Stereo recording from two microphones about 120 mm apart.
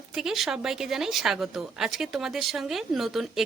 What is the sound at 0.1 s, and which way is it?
Speech, 5° right (ahead or behind).